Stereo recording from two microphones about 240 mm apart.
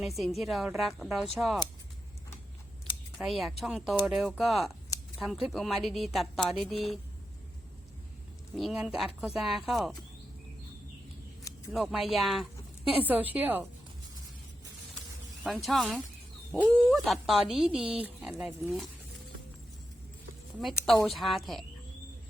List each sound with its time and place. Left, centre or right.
0.0 s a woman's voice: centre
3.2 s a woman's voice: centre
8.5 s a woman's voice: centre
11.7 s a woman's voice: centre
15.6 s a woman's voice: centre
20.7 s a woman's voice: centre